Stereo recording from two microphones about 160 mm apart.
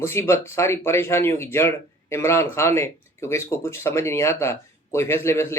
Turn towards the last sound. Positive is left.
turn(degrees=15)  # may be behind; listen again after turning